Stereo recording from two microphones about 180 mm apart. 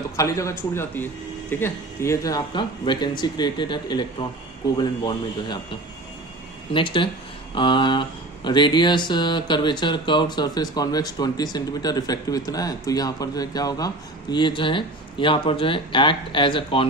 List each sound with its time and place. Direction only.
0.1 s a man's voice: 15° left (ahead or behind)
6.7 s speech: 25° left (ahead or behind)